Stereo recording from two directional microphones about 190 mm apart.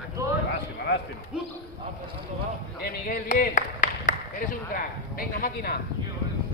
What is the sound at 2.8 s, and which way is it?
A man's voice, 50° left (ahead or behind).